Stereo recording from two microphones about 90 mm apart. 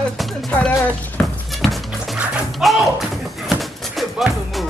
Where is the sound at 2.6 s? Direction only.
Centre (ahead or behind).